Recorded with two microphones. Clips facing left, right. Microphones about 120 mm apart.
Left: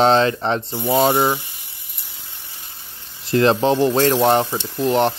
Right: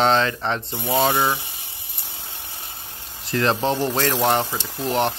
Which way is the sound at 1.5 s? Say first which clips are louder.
Right 4 dB; 65° right (ahead or behind).